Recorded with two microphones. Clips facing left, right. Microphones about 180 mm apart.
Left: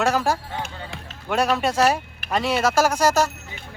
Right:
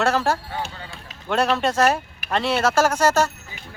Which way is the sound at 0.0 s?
15° left (ahead or behind).